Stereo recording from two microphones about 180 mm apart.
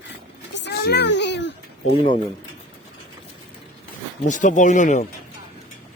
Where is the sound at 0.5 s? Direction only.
70° left (ahead or behind).